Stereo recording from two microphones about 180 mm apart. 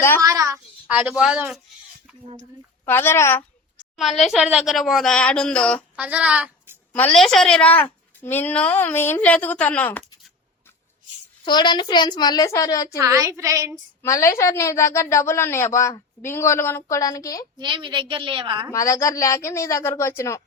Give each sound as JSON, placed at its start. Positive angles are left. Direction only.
{"t": 0.2, "sound": "a child's voice", "side_deg": -15}
{"t": 2.2, "sound": "speech", "side_deg": -45}
{"t": 2.8, "sound": "a woman's voice", "side_deg": 10}
{"t": 3.9, "sound": "speech", "side_deg": 0}
{"t": 6.0, "sound": "speech", "side_deg": -5}
{"t": 6.9, "sound": "a woman's voice", "side_deg": 5}
{"t": 11.4, "sound": "a woman's voice", "side_deg": 25}
{"t": 13.0, "sound": "a child's voice", "side_deg": -20}
{"t": 14.0, "sound": "a woman's voice", "side_deg": 15}
{"t": 17.6, "sound": "a woman's voice", "side_deg": -25}
{"t": 18.7, "sound": "a woman's voice", "side_deg": 20}